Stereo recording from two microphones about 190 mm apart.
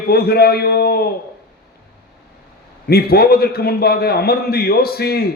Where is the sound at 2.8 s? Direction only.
55° left (ahead or behind).